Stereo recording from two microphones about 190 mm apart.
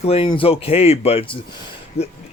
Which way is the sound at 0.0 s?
30° left (ahead or behind).